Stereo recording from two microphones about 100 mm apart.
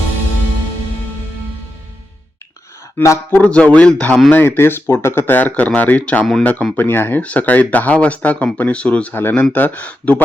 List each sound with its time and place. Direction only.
3.0 s speech: 30° left (ahead or behind)
3.4 s speech: 10° left (ahead or behind)
4.3 s speech: 20° left (ahead or behind)